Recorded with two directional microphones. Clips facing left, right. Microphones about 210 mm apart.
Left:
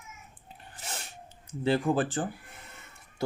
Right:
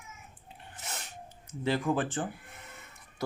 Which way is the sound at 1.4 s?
30° left (ahead or behind).